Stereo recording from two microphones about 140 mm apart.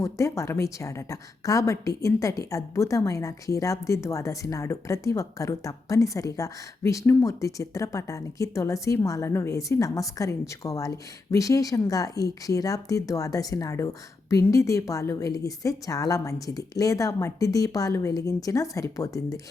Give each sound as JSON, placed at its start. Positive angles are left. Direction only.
{"t": 0.0, "sound": "a woman's voice", "side_deg": 20}